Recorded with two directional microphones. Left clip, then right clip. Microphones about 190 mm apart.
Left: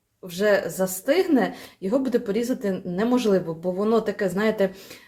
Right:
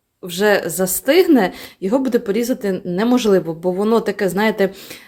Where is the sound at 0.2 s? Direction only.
45° right (ahead or behind).